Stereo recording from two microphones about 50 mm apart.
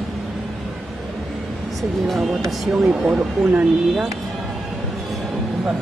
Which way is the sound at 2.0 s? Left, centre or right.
Centre.